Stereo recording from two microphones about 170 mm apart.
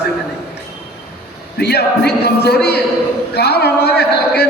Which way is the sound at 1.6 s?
75° left (ahead or behind).